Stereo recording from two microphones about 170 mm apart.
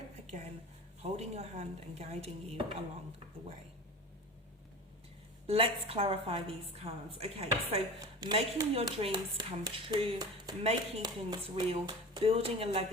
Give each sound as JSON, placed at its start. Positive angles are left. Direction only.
{"t": 1.0, "sound": "a woman's voice", "side_deg": -40}
{"t": 5.5, "sound": "a woman's voice", "side_deg": -35}
{"t": 11.0, "sound": "a woman's voice", "side_deg": -25}